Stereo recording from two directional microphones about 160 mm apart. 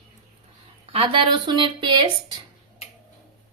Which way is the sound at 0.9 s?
35° right (ahead or behind).